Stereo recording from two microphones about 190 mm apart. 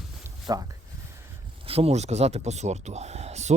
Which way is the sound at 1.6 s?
30° right (ahead or behind).